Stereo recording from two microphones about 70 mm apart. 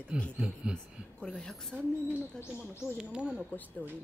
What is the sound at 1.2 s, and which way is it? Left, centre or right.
Speech, centre.